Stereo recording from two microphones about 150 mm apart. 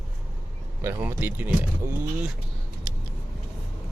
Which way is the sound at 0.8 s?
15° right (ahead or behind).